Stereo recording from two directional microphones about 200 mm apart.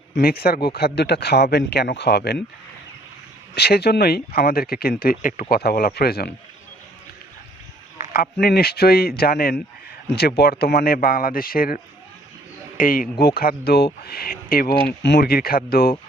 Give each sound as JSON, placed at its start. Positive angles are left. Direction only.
{"t": 0.2, "sound": "speech", "side_deg": 50}
{"t": 3.5, "sound": "speech", "side_deg": 55}
{"t": 7.9, "sound": "speech", "side_deg": 45}